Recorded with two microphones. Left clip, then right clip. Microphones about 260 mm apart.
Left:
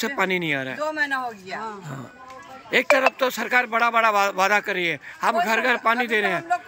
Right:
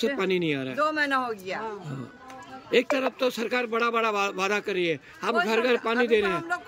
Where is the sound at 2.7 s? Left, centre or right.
Centre.